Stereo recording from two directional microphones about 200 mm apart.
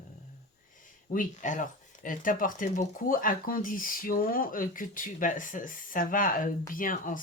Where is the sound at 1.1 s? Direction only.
40° left (ahead or behind).